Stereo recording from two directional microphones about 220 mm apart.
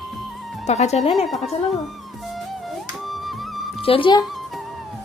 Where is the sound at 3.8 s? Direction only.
25° left (ahead or behind).